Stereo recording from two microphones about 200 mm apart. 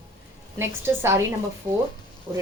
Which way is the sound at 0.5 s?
10° right (ahead or behind).